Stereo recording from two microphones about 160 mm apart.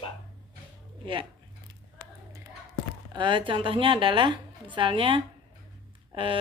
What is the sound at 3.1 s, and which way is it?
A woman's voice, 30° right (ahead or behind).